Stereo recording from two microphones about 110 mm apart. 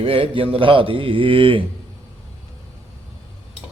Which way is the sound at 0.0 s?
55° right (ahead or behind).